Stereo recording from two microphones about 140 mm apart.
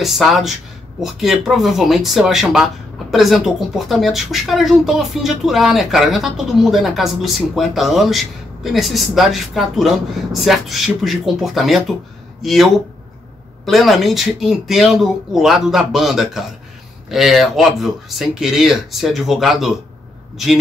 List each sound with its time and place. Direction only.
0.0 s speech: centre (ahead or behind)
13.7 s speech: centre (ahead or behind)